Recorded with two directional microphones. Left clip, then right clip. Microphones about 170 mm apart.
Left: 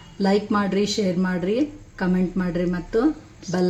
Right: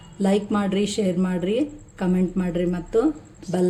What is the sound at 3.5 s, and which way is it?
Speech, 25° right (ahead or behind).